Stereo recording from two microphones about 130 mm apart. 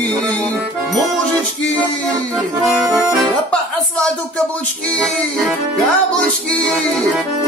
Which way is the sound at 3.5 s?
10° left (ahead or behind).